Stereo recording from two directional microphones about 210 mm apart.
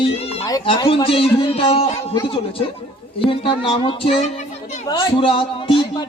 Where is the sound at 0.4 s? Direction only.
20° left (ahead or behind).